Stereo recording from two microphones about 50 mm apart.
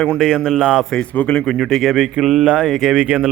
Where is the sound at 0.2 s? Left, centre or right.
Centre.